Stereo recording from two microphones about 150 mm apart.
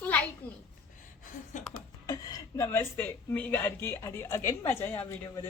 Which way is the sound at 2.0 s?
20° left (ahead or behind).